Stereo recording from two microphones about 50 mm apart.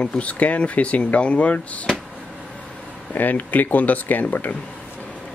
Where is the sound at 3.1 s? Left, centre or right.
Left.